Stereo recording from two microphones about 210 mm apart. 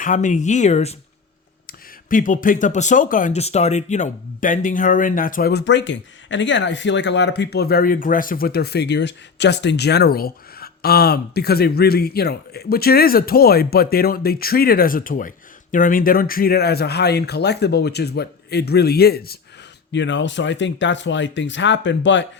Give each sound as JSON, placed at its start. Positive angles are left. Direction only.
{"t": 0.0, "sound": "speech", "side_deg": 35}
{"t": 2.0, "sound": "speech", "side_deg": 40}
{"t": 19.9, "sound": "speech", "side_deg": 60}